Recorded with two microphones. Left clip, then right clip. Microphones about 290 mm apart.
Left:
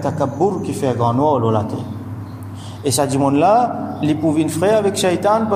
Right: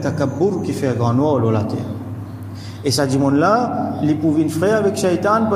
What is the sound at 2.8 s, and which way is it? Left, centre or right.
A man's voice, centre.